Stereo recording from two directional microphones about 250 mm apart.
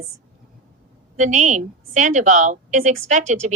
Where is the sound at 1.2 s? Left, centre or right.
Right.